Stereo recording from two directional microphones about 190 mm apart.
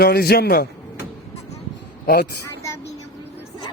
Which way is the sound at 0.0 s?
55° left (ahead or behind).